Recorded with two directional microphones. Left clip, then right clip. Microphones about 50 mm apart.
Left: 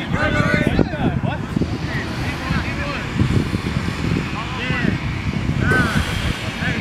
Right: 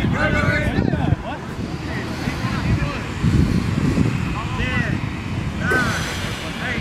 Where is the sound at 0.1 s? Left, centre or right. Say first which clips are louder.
Left 2 dB; centre.